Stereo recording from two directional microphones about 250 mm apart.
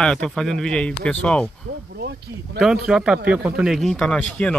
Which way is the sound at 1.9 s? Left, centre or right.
Right.